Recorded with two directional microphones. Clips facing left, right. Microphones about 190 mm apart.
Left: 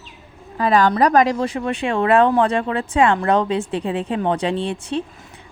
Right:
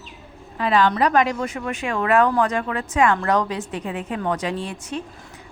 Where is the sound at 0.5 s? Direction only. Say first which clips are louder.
Left 3 dB; 40° left (ahead or behind).